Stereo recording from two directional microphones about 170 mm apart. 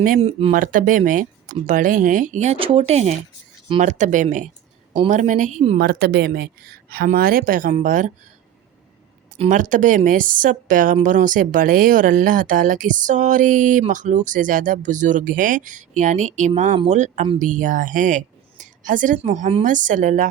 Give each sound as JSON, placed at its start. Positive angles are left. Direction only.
{"t": 0.2, "sound": "speech", "side_deg": -35}
{"t": 0.5, "sound": "a woman's voice", "side_deg": -50}
{"t": 5.8, "sound": "a woman's voice", "side_deg": -65}
{"t": 6.9, "sound": "a woman's voice", "side_deg": -60}
{"t": 9.5, "sound": "a woman's voice", "side_deg": -50}